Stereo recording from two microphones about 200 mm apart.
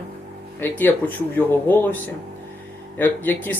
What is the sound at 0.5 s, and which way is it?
Speech, 10° left (ahead or behind).